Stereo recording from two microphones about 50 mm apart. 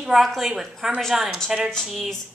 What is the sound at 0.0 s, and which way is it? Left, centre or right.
A woman's voice, centre.